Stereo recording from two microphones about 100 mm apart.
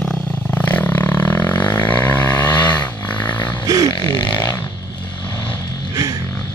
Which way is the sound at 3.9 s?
45° left (ahead or behind).